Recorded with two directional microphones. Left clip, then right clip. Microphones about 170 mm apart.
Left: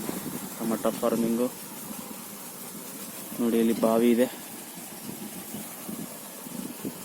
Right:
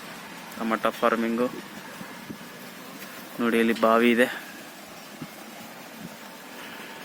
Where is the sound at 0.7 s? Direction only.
15° right (ahead or behind).